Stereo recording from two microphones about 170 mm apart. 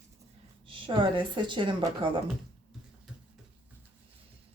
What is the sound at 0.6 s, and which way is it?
A woman's voice, 30° right (ahead or behind).